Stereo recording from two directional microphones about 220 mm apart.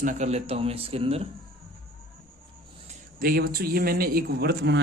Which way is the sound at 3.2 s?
40° right (ahead or behind).